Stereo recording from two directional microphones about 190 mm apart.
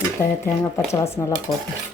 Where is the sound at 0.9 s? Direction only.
15° left (ahead or behind).